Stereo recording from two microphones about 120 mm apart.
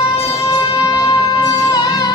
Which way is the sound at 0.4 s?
30° left (ahead or behind).